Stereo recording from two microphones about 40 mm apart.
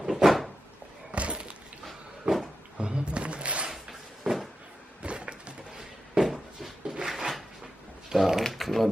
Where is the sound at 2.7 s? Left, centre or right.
Right.